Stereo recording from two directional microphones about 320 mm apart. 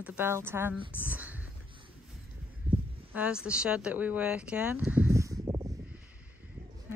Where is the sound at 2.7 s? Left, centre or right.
Centre.